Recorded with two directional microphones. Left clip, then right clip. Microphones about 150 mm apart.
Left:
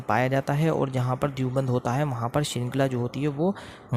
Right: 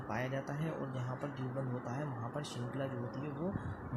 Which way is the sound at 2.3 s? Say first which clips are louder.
Left 14 dB; 75° left (ahead or behind).